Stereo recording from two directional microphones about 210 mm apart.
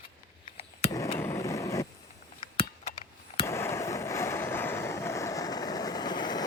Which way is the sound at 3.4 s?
10° left (ahead or behind).